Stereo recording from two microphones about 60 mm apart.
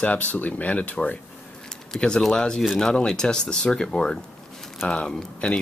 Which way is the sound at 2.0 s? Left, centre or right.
Centre.